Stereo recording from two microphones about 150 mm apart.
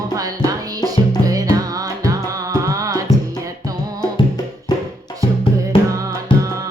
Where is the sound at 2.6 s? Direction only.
20° right (ahead or behind).